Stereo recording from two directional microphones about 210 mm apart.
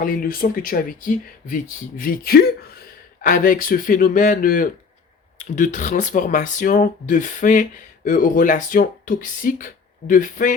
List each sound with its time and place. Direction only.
0.0 s speech: 40° left (ahead or behind)